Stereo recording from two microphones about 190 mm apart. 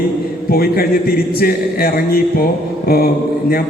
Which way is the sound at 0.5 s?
50° left (ahead or behind).